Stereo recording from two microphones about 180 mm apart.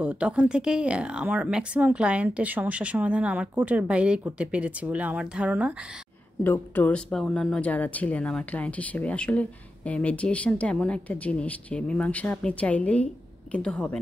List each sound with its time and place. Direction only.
0.0 s a woman's voice: 5° right (ahead or behind)
6.4 s speech: 10° left (ahead or behind)